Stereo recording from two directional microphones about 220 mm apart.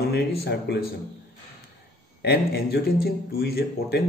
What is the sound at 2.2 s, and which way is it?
Speech, 45° left (ahead or behind).